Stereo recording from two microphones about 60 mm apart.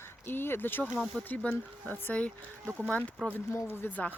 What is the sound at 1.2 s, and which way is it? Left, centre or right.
Speech, centre.